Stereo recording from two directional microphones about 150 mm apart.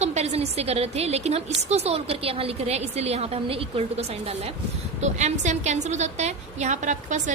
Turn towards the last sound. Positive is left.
turn(degrees=-55)  # may be behind; listen again after turning